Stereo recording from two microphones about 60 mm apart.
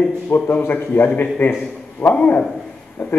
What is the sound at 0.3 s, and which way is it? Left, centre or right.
A man's voice, left.